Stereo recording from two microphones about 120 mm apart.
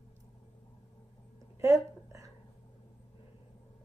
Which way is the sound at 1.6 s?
25° right (ahead or behind).